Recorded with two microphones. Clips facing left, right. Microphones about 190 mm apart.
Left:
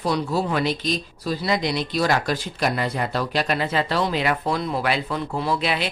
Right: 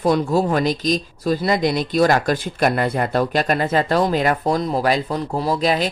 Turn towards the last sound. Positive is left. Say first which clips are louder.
# right 5 dB
turn(degrees=-40)  # may be behind; listen again after turning